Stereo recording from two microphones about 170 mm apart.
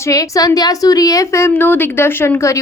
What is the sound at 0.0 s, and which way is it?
A woman's voice, 20° left (ahead or behind).